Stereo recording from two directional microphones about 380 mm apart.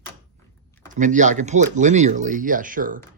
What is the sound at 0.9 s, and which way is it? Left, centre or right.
Speech, centre.